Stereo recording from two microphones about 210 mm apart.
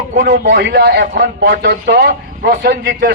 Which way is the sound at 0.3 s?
55° right (ahead or behind).